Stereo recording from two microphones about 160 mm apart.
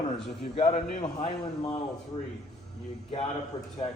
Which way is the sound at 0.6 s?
50° left (ahead or behind).